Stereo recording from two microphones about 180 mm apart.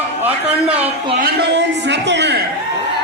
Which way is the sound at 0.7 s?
10° right (ahead or behind).